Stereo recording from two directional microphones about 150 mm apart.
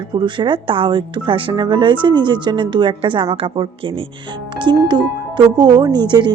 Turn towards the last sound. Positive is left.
turn(degrees=-30)  # may be behind; listen again after turning